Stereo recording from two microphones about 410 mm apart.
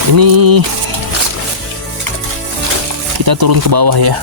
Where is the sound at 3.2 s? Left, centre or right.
Right.